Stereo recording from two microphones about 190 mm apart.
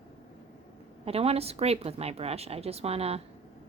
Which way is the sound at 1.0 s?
30° right (ahead or behind).